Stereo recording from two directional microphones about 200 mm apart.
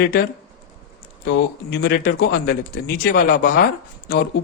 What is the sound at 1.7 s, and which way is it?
Speech, 50° left (ahead or behind).